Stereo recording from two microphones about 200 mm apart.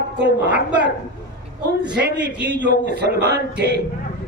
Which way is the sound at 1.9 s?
55° right (ahead or behind).